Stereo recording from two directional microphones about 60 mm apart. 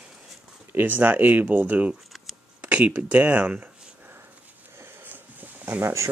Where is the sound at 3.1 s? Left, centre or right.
Right.